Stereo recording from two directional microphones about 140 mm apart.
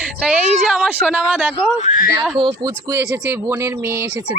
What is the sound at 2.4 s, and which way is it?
Speech, 30° right (ahead or behind).